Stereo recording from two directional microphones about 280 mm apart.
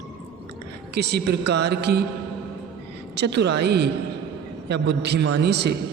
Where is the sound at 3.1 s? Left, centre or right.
Right.